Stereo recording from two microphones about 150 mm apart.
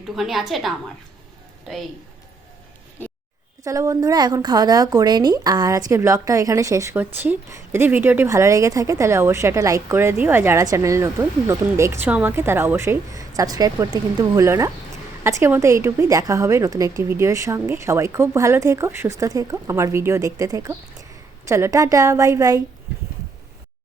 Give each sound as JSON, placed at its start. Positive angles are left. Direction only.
{"t": 0.2, "sound": "a woman's voice", "side_deg": 0}
{"t": 3.6, "sound": "a woman's voice", "side_deg": -20}